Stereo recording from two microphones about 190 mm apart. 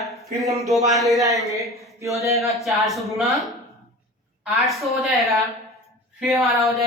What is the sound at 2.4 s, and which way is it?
A man's voice, centre (ahead or behind).